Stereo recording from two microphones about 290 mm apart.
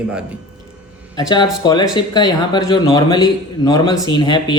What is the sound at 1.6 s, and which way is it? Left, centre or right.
A man's voice, centre.